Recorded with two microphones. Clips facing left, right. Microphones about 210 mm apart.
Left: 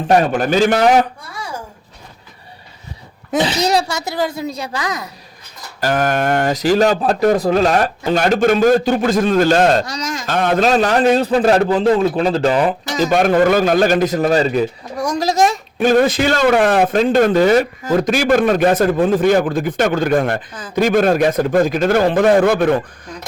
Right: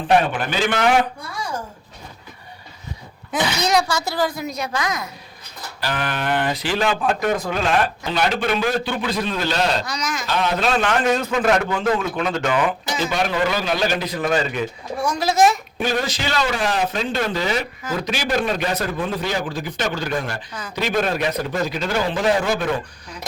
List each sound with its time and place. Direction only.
0.1 s speech: 40° left (ahead or behind)
3.3 s speech: 30° left (ahead or behind)
5.8 s a man's voice: 45° left (ahead or behind)